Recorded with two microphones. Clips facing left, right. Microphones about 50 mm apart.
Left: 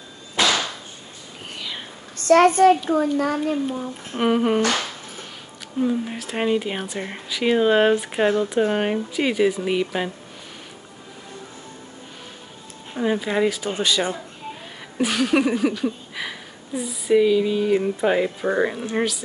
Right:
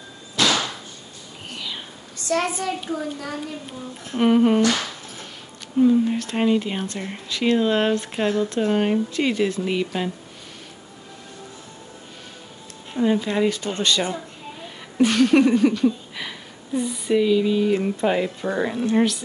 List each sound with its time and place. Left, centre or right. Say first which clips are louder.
0.4 s a sound: even; left
2.1 s a child's voice: left 9 dB; left
4.2 s speech: right 3 dB; centre
5.8 s speech: right 6 dB; centre
12.9 s speech: right 1 dB; centre
18.9 s speech: right 4 dB; centre